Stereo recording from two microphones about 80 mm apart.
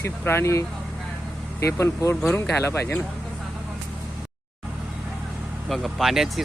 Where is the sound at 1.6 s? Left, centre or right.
Left.